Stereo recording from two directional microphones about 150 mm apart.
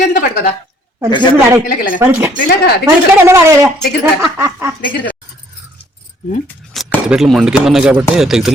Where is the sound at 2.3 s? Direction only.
65° left (ahead or behind).